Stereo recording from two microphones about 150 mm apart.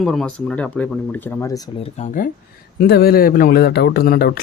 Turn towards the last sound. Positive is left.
turn(degrees=85)